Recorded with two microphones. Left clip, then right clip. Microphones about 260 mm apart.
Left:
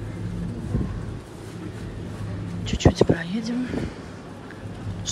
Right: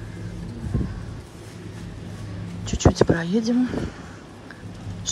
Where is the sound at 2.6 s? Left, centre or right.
Right.